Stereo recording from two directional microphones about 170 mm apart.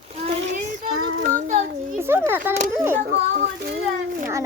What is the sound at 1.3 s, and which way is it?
Child singing, 50° right (ahead or behind).